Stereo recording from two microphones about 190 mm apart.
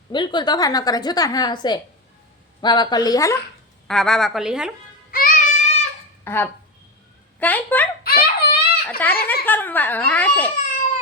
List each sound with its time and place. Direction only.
0.1 s a woman's voice: 25° left (ahead or behind)
3.8 s a woman's voice: centre (ahead or behind)
5.1 s a sound: 45° left (ahead or behind)
6.2 s a child's voice: 10° left (ahead or behind)
8.0 s baby cry: 55° left (ahead or behind)
9.0 s a child's voice: 10° left (ahead or behind)